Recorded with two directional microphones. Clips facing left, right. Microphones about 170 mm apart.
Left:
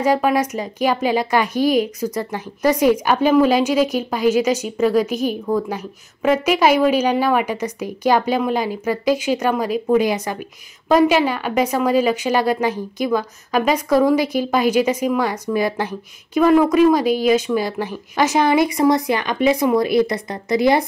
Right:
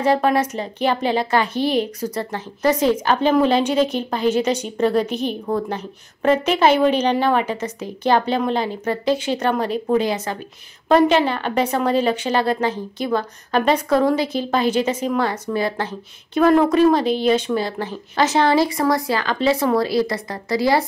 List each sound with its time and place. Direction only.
0.0 s a woman's voice: 10° left (ahead or behind)
16.3 s a woman's voice: 5° left (ahead or behind); by 20.8 s 20° left (ahead or behind)